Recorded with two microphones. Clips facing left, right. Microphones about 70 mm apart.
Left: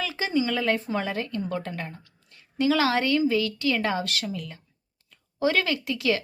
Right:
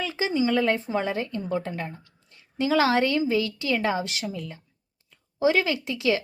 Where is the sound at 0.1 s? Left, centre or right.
Right.